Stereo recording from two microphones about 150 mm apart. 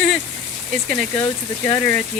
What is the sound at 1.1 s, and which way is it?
Speech, 25° left (ahead or behind).